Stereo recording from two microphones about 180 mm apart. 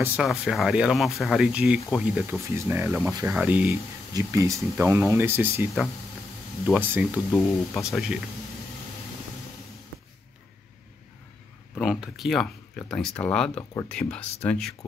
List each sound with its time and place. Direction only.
0.0 s speech: 5° right (ahead or behind)
2.2 s speech: 15° right (ahead or behind)
6.7 s speech: 10° right (ahead or behind)
11.7 s speech: 5° right (ahead or behind)